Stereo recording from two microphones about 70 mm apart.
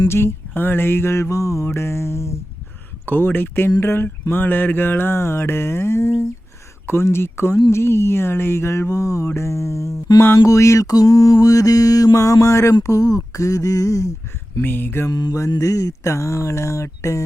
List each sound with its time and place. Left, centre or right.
0.1 s mantra: left
3.1 s speech: left
3.8 s mantra: left
12.8 s speech: left
14.6 s mantra: left
15.1 s mantra: left
15.5 s speech: left